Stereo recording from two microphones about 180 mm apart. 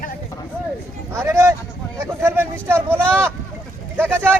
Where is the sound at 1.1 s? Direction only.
15° right (ahead or behind).